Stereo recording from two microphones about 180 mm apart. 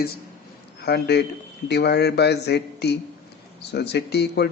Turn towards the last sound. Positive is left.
turn(degrees=65)  # may be behind; listen again after turning